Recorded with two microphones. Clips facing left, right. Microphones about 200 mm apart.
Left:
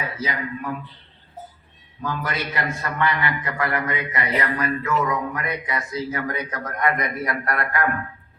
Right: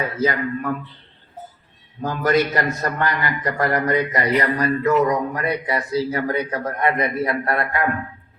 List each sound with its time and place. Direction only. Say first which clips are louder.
0.2 s speech: right 7 dB; 50° right (ahead or behind)
2.0 s a man's voice: right 9 dB; 45° right (ahead or behind); by 7.9 s 25° right (ahead or behind)